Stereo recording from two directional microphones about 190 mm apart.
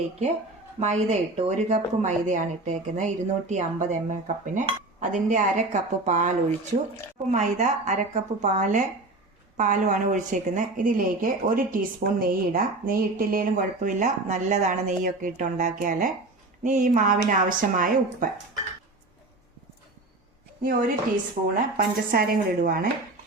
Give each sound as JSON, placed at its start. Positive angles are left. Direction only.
{"t": 0.8, "sound": "a woman's voice", "side_deg": -35}
{"t": 21.5, "sound": "a woman's voice", "side_deg": -50}